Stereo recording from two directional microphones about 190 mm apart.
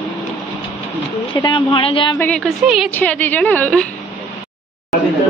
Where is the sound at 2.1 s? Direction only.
5° left (ahead or behind).